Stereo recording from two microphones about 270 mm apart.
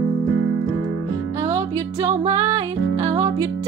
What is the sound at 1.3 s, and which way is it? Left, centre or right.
Music, centre.